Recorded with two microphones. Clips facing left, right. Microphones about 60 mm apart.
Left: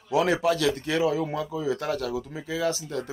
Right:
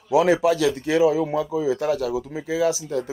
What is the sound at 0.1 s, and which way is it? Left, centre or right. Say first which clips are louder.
Speech: right 5 dB; centre.